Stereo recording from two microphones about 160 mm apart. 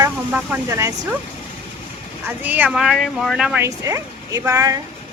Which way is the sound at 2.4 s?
10° right (ahead or behind).